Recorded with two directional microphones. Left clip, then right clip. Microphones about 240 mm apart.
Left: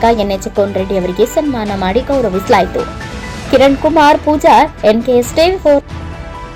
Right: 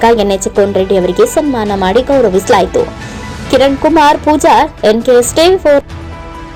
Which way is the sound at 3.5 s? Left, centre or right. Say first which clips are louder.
Right 1 dB; centre.